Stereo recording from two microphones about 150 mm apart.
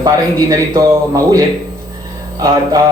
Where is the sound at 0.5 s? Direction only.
20° right (ahead or behind).